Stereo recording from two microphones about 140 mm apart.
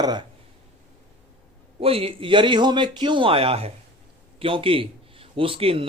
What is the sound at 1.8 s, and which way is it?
A man's voice, 40° right (ahead or behind).